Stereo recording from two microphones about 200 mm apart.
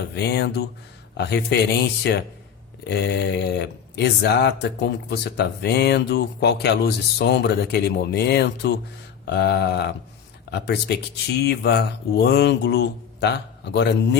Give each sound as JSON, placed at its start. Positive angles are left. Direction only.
{"t": 0.2, "sound": "speech", "side_deg": 55}